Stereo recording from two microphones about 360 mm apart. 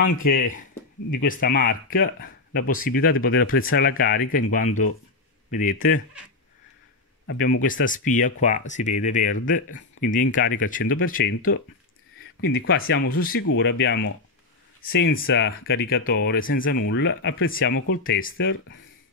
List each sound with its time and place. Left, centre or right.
0.0 s speech: left
7.2 s speech: left
10.8 s speech: left
11.1 s speech: left
12.6 s speech: left